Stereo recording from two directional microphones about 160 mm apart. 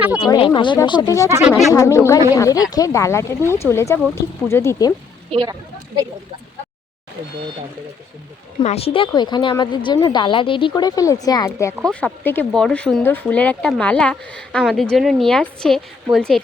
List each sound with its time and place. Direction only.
0.2 s speech: 30° left (ahead or behind)
1.5 s speech: centre (ahead or behind)
1.7 s speech: 20° left (ahead or behind)
5.3 s speech: 30° right (ahead or behind)
8.6 s speech: 40° left (ahead or behind); by 11.7 s 20° left (ahead or behind)
11.8 s speech: 5° left (ahead or behind)